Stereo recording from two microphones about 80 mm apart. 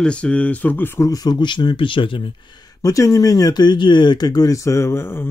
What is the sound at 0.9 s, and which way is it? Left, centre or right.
Speech, left.